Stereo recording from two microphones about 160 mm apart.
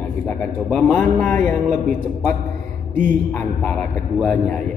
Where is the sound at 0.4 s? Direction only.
5° left (ahead or behind).